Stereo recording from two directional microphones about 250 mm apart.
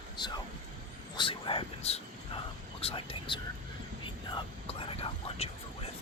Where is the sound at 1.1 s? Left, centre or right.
Left.